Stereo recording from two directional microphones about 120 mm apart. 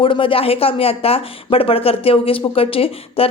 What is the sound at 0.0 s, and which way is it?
Speech, 45° left (ahead or behind).